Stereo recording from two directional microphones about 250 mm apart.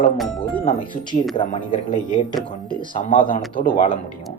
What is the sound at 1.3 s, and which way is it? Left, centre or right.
Speech, left.